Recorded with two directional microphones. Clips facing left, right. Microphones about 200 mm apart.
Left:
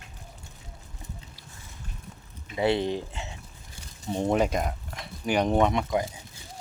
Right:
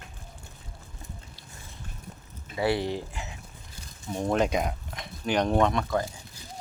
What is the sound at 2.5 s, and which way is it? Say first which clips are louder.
Speech: left 2 dB; 20° left (ahead or behind).